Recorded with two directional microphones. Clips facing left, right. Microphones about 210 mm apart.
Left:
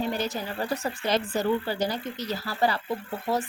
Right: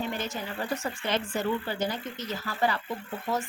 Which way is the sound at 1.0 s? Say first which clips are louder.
Left 4 dB; 40° left (ahead or behind).